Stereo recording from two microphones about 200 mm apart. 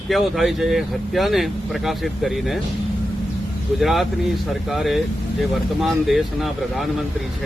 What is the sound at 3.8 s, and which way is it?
Speech, centre (ahead or behind).